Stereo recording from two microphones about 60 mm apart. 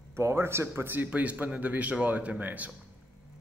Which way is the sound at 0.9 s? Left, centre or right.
Right.